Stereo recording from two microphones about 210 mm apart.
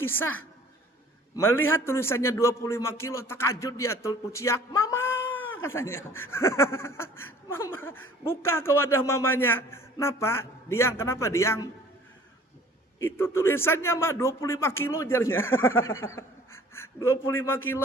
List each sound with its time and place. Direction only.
0.0 s a woman's voice: 10° left (ahead or behind)
1.4 s snicker: 10° left (ahead or behind)
5.4 s a sound: 70° left (ahead or behind)
5.6 s snicker: 10° left (ahead or behind)
13.0 s snicker: 10° left (ahead or behind)